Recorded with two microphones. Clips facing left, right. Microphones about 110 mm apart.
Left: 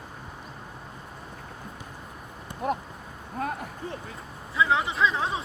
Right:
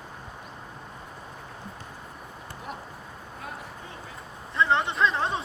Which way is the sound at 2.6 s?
55° left (ahead or behind).